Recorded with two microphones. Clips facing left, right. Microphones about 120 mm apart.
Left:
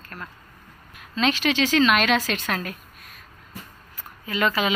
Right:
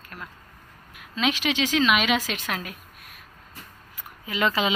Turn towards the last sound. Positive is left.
turn(degrees=-20)  # may be behind; listen again after turning